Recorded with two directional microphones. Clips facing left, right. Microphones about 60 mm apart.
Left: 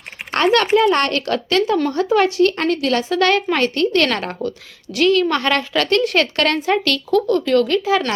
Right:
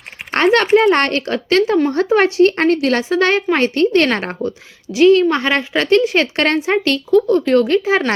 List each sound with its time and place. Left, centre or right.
0.3 s a woman's voice: right